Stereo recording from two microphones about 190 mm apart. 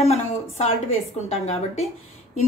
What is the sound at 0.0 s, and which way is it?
A woman's voice, 35° left (ahead or behind).